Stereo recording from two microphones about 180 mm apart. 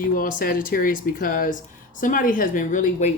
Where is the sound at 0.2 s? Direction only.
50° left (ahead or behind).